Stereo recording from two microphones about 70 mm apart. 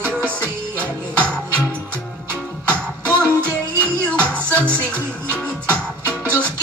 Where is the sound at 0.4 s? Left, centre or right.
Centre.